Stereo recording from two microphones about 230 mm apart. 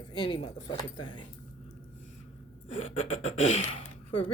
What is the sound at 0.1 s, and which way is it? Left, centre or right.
Speech, centre.